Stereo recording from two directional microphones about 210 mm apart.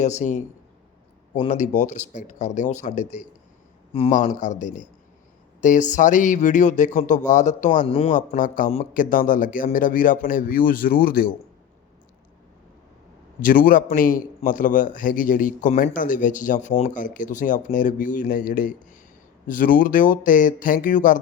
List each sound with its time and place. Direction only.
0.0 s speech: 35° left (ahead or behind)
13.4 s speech: 40° left (ahead or behind)